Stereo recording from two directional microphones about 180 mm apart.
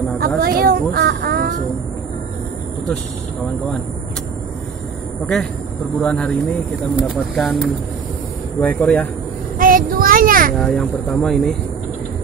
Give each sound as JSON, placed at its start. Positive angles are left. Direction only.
{"t": 0.4, "sound": "speech", "side_deg": -55}
{"t": 5.2, "sound": "speech", "side_deg": 5}
{"t": 9.6, "sound": "child singing", "side_deg": -50}
{"t": 10.6, "sound": "speech", "side_deg": 0}